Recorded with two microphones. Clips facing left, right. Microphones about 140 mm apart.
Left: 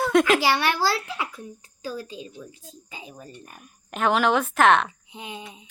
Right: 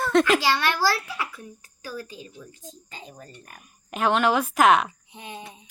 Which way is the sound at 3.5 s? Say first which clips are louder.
Right 4 dB; centre (ahead or behind).